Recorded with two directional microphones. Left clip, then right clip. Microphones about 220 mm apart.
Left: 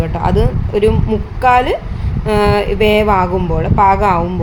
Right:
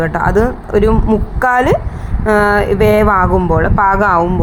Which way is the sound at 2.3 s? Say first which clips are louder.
Right 2 dB; 10° right (ahead or behind).